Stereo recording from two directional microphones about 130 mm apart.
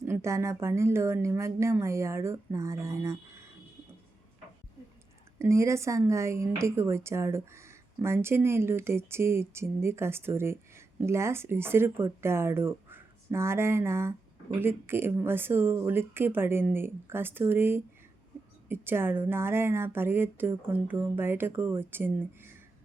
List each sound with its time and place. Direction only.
0.0 s a woman's voice: 20° right (ahead or behind)
5.4 s a woman's voice: 20° right (ahead or behind)